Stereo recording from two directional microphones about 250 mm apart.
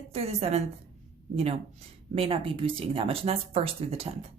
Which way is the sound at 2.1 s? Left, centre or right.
Right.